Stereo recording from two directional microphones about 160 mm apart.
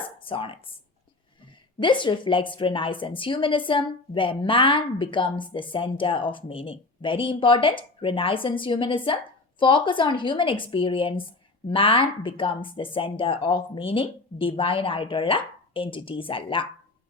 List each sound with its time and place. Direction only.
0.3 s a woman's voice: 35° left (ahead or behind)
1.8 s a woman's voice: 30° left (ahead or behind)